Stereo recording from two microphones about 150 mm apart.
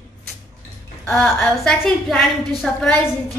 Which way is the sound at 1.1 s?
5° left (ahead or behind).